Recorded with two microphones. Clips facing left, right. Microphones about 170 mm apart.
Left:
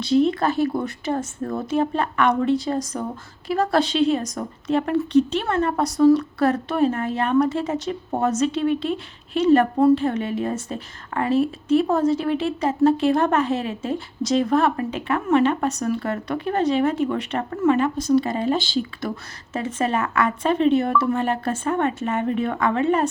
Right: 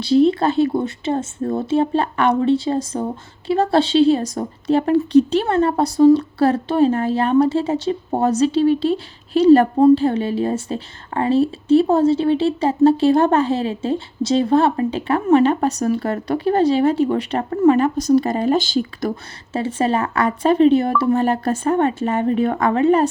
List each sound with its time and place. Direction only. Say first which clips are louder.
0.0 s speech: right 4 dB; 30° right (ahead or behind)
19.5 s speech: right 4 dB; 30° right (ahead or behind)